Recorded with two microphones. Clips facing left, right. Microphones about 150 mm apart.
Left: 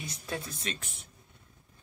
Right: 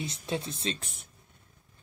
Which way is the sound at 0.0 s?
25° right (ahead or behind).